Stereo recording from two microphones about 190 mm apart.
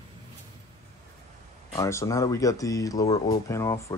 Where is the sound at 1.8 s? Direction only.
15° left (ahead or behind).